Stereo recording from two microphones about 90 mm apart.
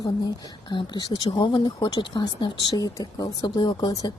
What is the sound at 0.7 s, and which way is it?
Speech, 60° left (ahead or behind).